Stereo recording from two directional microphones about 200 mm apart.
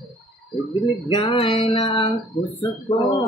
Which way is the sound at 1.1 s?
25° left (ahead or behind).